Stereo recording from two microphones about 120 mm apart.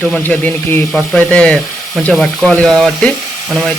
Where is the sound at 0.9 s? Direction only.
10° left (ahead or behind).